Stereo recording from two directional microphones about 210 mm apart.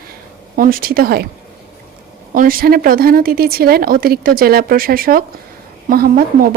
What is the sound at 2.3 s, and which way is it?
A woman's voice, 40° right (ahead or behind).